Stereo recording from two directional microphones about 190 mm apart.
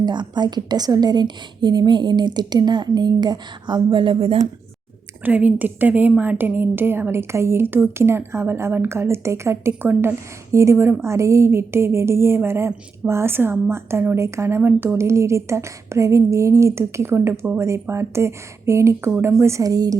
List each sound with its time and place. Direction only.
0.0 s a woman's voice: 25° right (ahead or behind)
5.2 s a woman's voice: 10° right (ahead or behind)